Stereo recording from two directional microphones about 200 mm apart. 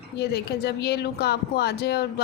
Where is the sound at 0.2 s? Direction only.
55° left (ahead or behind).